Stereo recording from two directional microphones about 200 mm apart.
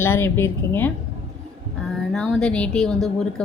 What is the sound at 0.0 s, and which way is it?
Speech, 10° left (ahead or behind).